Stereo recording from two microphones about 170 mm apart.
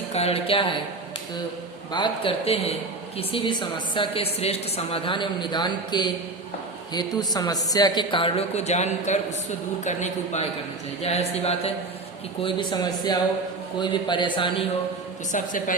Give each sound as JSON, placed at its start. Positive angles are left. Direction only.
{"t": 0.1, "sound": "a woman's voice", "side_deg": 35}
{"t": 1.9, "sound": "a woman's voice", "side_deg": 30}
{"t": 15.3, "sound": "a man's voice", "side_deg": 50}